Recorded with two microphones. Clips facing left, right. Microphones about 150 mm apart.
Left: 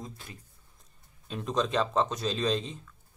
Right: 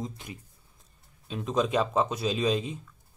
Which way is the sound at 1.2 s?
Centre (ahead or behind).